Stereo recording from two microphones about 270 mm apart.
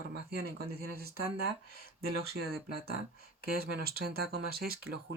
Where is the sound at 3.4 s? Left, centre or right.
Right.